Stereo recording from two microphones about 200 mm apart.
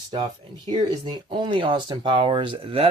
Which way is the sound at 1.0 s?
25° right (ahead or behind).